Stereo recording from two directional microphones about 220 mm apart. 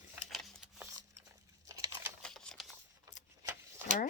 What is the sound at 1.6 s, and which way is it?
Crumpling, 15° right (ahead or behind).